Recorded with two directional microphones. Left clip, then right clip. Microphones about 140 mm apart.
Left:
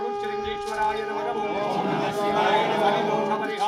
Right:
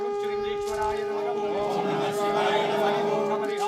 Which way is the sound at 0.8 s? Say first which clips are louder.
Left 5 dB; 5° right (ahead or behind).